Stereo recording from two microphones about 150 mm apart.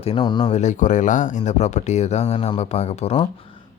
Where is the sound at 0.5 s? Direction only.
55° left (ahead or behind).